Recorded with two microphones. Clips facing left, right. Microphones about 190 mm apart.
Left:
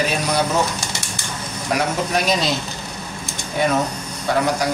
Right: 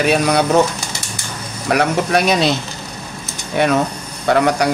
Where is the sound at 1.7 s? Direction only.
65° right (ahead or behind).